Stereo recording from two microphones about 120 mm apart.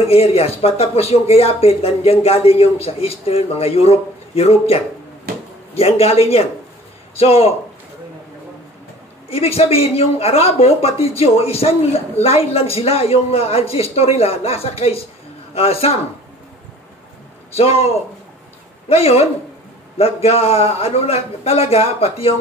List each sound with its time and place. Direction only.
0.0 s speech: 55° left (ahead or behind)
9.3 s speech: 55° left (ahead or behind)
17.6 s speech: 55° left (ahead or behind)